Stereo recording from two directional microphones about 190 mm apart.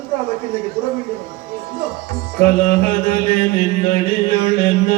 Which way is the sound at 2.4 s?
45° left (ahead or behind).